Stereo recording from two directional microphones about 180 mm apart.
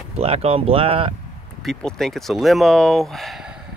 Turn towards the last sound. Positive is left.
turn(degrees=0)  # may be behind; listen again after turning